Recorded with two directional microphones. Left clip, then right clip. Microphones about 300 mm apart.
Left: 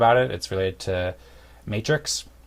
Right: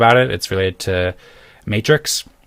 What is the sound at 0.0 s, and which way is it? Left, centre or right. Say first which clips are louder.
Speech: right 6 dB; right.